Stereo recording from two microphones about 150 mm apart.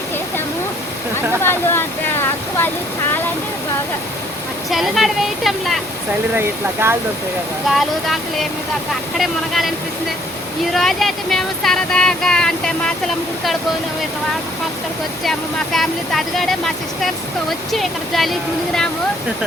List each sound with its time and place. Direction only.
1.4 s a sound: 15° left (ahead or behind)
4.7 s speech: centre (ahead or behind)
6.3 s speech: 15° right (ahead or behind)
7.7 s speech: centre (ahead or behind)
10.8 s speech: centre (ahead or behind)
15.2 s speech: centre (ahead or behind)